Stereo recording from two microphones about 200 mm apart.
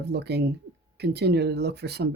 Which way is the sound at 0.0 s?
55° right (ahead or behind).